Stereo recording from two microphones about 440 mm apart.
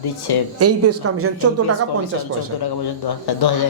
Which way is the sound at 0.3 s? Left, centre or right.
Left.